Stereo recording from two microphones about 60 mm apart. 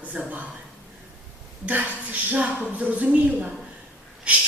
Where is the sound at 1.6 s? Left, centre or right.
Right.